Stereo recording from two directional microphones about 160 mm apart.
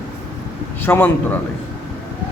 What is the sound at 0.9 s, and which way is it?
Speech, 10° left (ahead or behind).